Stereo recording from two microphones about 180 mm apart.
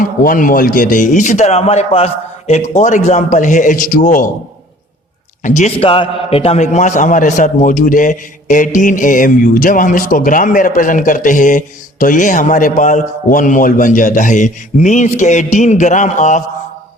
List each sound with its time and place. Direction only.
0.0 s a man's voice: 50° left (ahead or behind)
5.4 s a man's voice: 45° left (ahead or behind)